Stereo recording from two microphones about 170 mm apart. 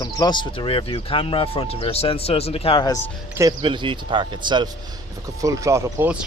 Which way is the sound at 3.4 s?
25° right (ahead or behind).